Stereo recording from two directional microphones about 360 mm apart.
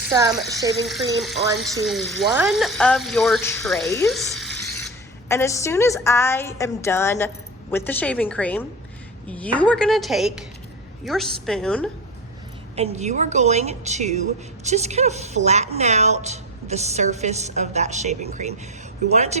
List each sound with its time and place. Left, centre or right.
0.1 s a woman's voice: centre
12.7 s a woman's voice: centre